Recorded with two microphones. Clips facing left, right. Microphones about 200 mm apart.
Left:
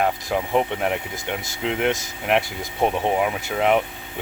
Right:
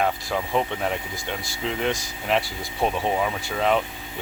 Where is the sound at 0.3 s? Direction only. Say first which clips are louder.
Left 3 dB; 15° left (ahead or behind).